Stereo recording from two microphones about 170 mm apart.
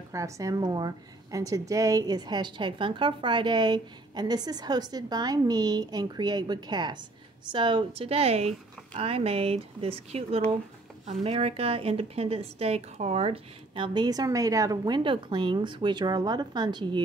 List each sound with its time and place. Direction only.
0.1 s a woman's voice: 20° right (ahead or behind)